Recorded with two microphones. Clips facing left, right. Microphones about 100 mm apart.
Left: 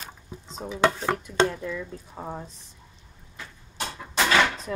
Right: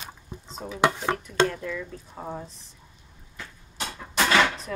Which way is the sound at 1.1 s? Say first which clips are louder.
Even; 15° left (ahead or behind).